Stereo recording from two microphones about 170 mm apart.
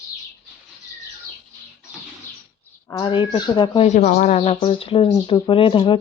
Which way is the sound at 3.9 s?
50° left (ahead or behind).